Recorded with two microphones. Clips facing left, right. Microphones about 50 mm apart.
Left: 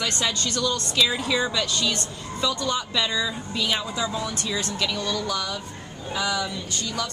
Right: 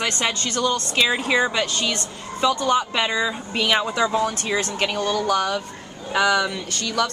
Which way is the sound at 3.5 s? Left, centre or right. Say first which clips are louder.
Right 7 dB; right.